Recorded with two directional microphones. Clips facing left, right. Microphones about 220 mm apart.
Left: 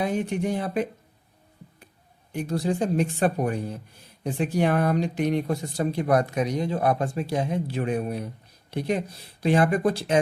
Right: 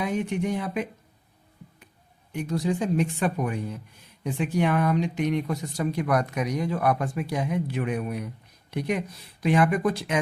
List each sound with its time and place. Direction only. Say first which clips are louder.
0.0 s speech: left 1 dB; 35° left (ahead or behind)
2.3 s speech: left 1 dB; 35° left (ahead or behind)